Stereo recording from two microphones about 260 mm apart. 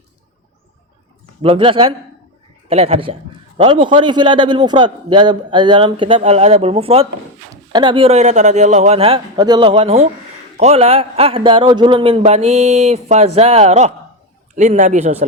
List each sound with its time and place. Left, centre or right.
1.4 s a man's voice: right